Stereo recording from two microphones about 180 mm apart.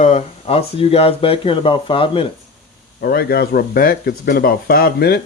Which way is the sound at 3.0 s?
60° left (ahead or behind).